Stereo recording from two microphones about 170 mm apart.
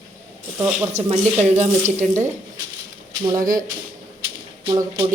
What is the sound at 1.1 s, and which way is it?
Speech, 40° right (ahead or behind).